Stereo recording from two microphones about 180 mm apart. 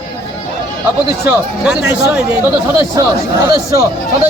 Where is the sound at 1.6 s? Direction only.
5° right (ahead or behind).